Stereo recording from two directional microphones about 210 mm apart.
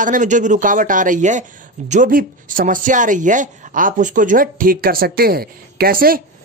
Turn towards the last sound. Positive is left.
turn(degrees=-45)  # may be behind; listen again after turning